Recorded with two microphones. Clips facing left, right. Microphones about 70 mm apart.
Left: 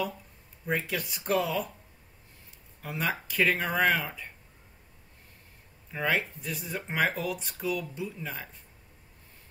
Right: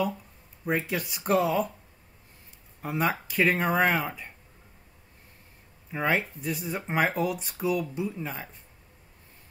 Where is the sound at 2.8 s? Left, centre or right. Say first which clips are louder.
Right 4 dB; right.